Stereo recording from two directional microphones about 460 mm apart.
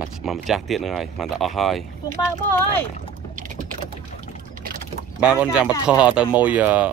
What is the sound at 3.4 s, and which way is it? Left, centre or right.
Boat, centre.